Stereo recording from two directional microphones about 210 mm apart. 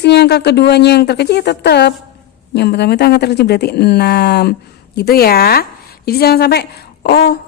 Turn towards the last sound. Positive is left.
turn(degrees=50)  # may be behind; listen again after turning